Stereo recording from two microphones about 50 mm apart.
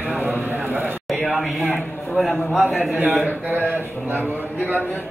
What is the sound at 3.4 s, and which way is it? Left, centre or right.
Speech, right.